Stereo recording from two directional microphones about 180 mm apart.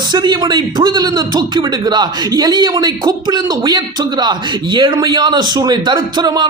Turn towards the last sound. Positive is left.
turn(degrees=-25)  # may be behind; listen again after turning